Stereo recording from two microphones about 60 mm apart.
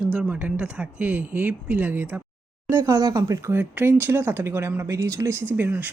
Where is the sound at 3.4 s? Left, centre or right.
Right.